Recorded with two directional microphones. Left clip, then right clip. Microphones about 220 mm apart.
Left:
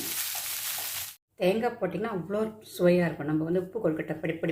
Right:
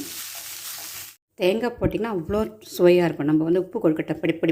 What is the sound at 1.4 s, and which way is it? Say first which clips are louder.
Speech: right 4 dB; 45° right (ahead or behind).